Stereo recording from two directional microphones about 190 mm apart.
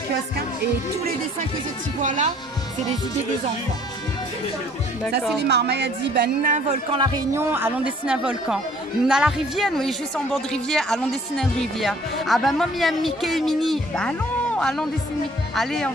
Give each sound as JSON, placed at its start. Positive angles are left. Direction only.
{"t": 2.0, "sound": "speech", "side_deg": -40}
{"t": 5.4, "sound": "a woman's voice", "side_deg": -60}
{"t": 6.9, "sound": "speech", "side_deg": -20}